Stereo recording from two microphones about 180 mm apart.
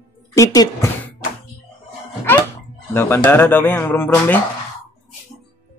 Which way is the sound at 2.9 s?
15° left (ahead or behind).